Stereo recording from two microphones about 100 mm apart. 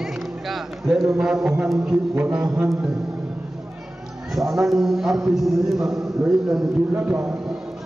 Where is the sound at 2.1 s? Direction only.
10° right (ahead or behind).